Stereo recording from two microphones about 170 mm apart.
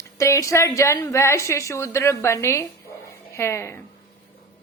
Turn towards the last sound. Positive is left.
turn(degrees=15)  # may be behind; listen again after turning